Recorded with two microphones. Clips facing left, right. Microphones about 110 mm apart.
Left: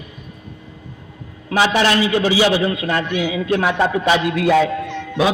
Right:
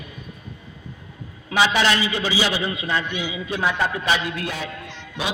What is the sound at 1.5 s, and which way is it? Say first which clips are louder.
A man's voice: left 3 dB; 50° left (ahead or behind).